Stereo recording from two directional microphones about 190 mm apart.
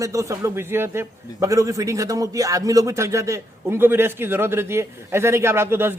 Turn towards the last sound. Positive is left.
turn(degrees=-10)  # may be behind; listen again after turning